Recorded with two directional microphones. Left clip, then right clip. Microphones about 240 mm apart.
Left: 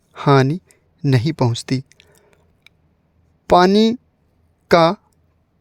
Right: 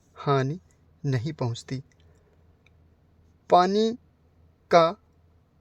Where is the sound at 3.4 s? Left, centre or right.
Left.